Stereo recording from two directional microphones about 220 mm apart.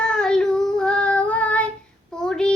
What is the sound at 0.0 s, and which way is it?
Child singing, 5° left (ahead or behind).